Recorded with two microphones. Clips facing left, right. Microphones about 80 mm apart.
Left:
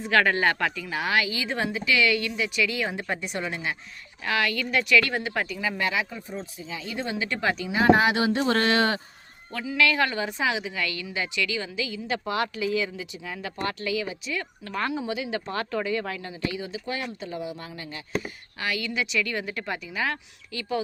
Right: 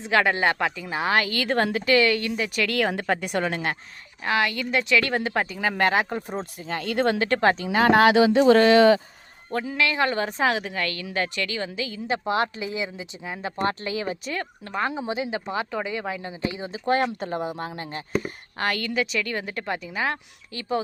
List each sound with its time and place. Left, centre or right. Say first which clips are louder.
0.0 s speech: right 1 dB; right
1.3 s speech: right 5 dB; right
4.2 s speech: right 2 dB; right
5.5 s a woman's voice: right 7 dB; right
7.7 s speech: right 1 dB; right
9.5 s speech: even; right
10.1 s a woman's voice: right 4 dB; right
12.0 s speech: right 5 dB; right
14.8 s speech: right 2 dB; right
15.4 s speech: right 1 dB; centre; by 16.8 s right
16.8 s a woman's voice: right 9 dB; right
17.7 s speech: right 4 dB; right